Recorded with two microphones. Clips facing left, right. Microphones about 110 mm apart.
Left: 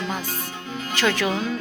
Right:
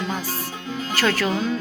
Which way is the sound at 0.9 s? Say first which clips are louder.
Even; 20° left (ahead or behind).